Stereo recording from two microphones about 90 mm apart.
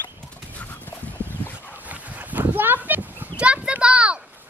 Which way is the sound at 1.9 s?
20° right (ahead or behind).